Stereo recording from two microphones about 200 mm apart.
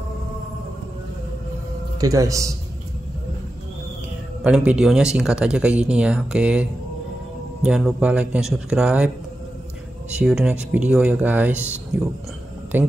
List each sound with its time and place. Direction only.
2.0 s speech: 15° right (ahead or behind)
4.4 s speech: 5° right (ahead or behind)
10.1 s speech: 5° right (ahead or behind)